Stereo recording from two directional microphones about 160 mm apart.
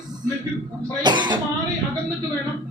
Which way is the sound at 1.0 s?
30° right (ahead or behind).